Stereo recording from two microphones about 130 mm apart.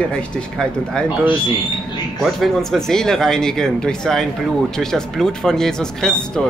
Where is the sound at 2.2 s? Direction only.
Centre (ahead or behind).